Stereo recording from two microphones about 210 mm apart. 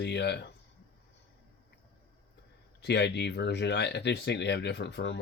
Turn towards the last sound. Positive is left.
turn(degrees=55)  # may be behind; listen again after turning